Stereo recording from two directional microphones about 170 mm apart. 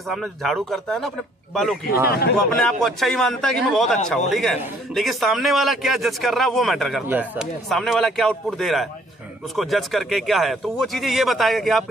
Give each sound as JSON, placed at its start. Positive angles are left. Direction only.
{"t": 0.1, "sound": "speech", "side_deg": 0}
{"t": 2.0, "sound": "speech", "side_deg": 65}
{"t": 2.3, "sound": "speech", "side_deg": 0}
{"t": 7.7, "sound": "speech", "side_deg": 0}